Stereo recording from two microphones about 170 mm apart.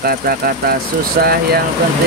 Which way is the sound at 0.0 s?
60° right (ahead or behind).